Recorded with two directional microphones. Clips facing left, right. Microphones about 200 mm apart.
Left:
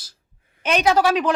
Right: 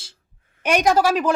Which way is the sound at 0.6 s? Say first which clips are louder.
Right 1 dB; 10° right (ahead or behind).